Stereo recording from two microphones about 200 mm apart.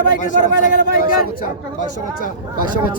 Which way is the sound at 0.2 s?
40° left (ahead or behind).